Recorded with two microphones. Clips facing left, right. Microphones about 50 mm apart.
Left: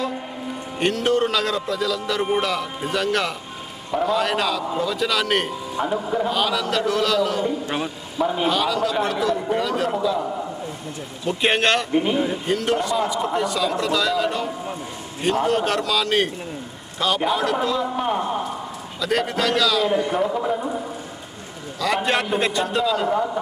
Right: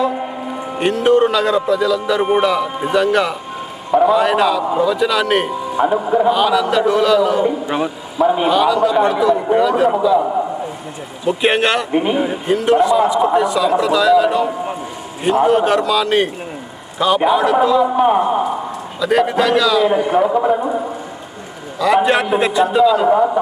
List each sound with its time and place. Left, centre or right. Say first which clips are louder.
0.8 s speech: right 7 dB; centre
5.8 s a man's voice: right 8 dB; right
6.2 s speech: right 8 dB; centre
10.2 s a man's voice: right 9 dB; right
11.3 s a man's voice: right 4 dB; centre
11.9 s a man's voice: right 4 dB; right
12.5 s a man's voice: right 12 dB; centre
17.8 s a man's voice: right 9 dB; centre
19.0 s a man's voice: right 7 dB; centre; by 20.9 s right
21.8 s speech: right 8 dB; centre
23.1 s a man's voice: right 8 dB; right